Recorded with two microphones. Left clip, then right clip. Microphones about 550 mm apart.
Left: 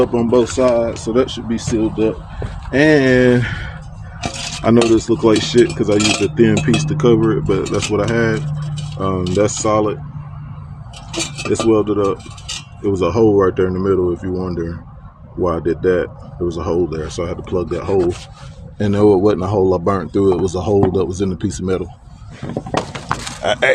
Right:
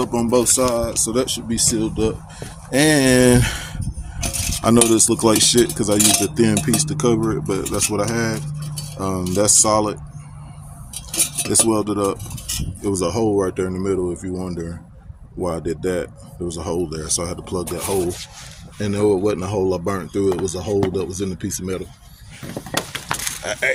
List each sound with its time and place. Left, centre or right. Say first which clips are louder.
0.0 s speech: left 4 dB; right
11.5 s speech: left 5 dB; right
18.8 s speech: left 6 dB; right
22.9 s a sound: left 2 dB; centre
23.4 s speech: left 7 dB; right